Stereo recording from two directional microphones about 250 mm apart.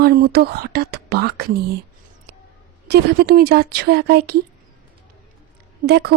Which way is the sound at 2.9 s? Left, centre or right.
Right.